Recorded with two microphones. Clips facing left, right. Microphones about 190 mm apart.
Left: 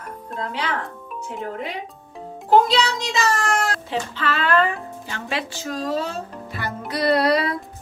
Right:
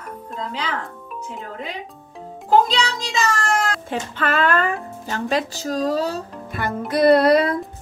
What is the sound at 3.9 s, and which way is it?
Speech, 50° right (ahead or behind).